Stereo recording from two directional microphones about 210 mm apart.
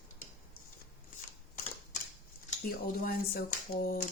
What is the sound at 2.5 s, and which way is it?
Typewriter, 45° left (ahead or behind).